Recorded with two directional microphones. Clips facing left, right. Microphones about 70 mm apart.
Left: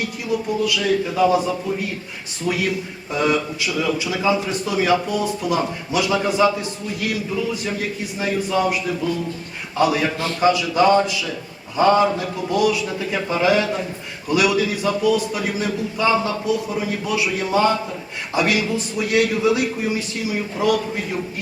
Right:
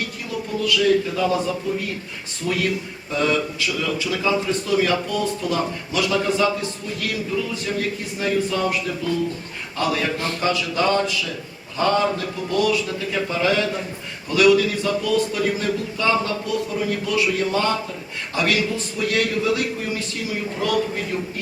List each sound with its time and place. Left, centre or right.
0.3 s a man's voice: centre
2.5 s a man's voice: centre